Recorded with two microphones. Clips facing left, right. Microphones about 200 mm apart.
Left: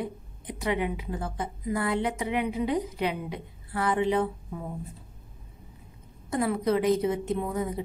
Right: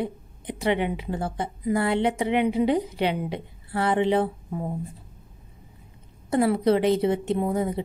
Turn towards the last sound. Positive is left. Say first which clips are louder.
# right 5 dB
turn(degrees=-30)  # may be behind; listen again after turning